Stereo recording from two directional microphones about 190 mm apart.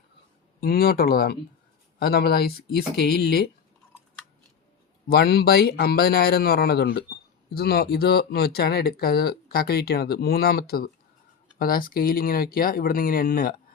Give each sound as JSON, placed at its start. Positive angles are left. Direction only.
{"t": 0.6, "sound": "speech", "side_deg": 50}
{"t": 5.0, "sound": "speech", "side_deg": 55}